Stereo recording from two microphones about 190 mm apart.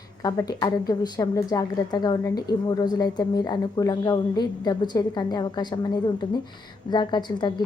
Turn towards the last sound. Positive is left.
turn(degrees=20)  # may be behind; listen again after turning